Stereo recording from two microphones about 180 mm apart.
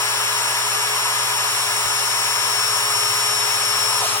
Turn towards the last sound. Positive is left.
turn(degrees=15)  # may be behind; listen again after turning